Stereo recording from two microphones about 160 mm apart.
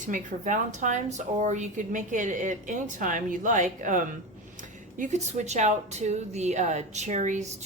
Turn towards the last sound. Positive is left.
turn(degrees=-50)  # may be behind; listen again after turning